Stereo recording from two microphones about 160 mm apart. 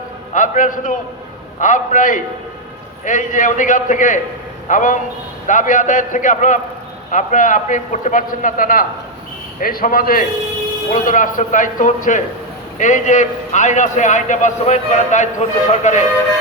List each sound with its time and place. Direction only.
0.3 s a man's voice: 55° left (ahead or behind)